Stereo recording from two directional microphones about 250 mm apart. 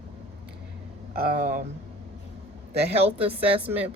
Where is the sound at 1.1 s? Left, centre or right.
Right.